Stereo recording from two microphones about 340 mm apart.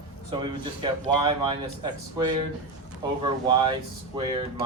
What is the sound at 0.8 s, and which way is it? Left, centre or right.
Speech, centre.